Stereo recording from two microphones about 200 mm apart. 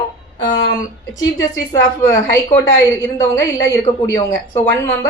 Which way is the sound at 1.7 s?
15° left (ahead or behind).